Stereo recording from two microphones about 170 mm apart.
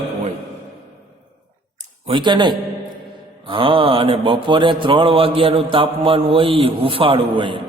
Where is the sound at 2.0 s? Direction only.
30° right (ahead or behind).